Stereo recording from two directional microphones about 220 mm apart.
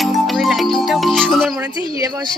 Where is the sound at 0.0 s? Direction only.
Centre (ahead or behind).